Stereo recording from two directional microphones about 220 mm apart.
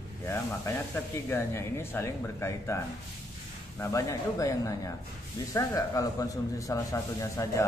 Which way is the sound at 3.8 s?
15° left (ahead or behind).